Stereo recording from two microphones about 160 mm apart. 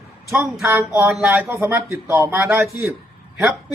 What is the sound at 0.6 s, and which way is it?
Speech, 15° right (ahead or behind).